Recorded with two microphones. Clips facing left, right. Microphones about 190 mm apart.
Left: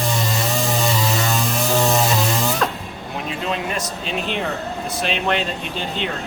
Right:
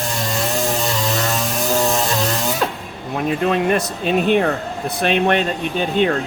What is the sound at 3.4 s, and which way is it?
Speech, 55° right (ahead or behind).